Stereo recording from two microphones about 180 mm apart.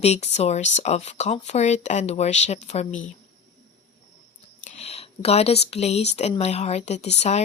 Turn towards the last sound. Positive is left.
turn(degrees=40)  # may be behind; listen again after turning